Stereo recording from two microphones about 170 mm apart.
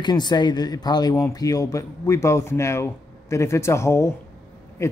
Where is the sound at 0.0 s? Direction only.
25° left (ahead or behind).